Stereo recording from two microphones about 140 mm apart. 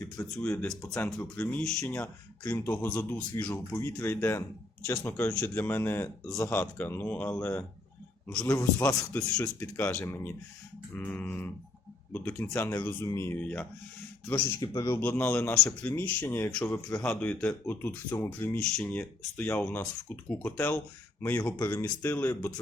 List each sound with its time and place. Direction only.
0.3 s speech: 10° left (ahead or behind)
8.5 s speech: 25° left (ahead or behind)
14.6 s speech: 25° left (ahead or behind)
15.0 s speech: 15° left (ahead or behind)